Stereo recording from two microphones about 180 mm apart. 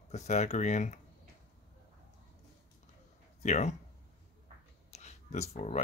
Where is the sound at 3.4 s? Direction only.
40° left (ahead or behind).